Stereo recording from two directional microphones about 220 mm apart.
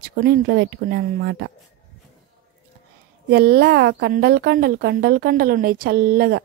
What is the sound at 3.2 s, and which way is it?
Speech, 45° right (ahead or behind).